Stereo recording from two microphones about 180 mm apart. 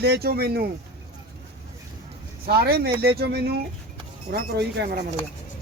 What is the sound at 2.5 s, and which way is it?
Speech, 60° right (ahead or behind).